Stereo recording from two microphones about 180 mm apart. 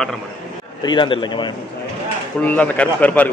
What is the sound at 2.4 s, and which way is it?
Speech, 10° left (ahead or behind).